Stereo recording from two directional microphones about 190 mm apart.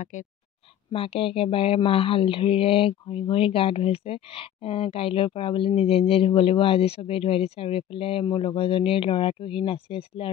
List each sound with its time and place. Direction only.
0.0 s speech: 40° left (ahead or behind)
0.9 s speech: 30° left (ahead or behind)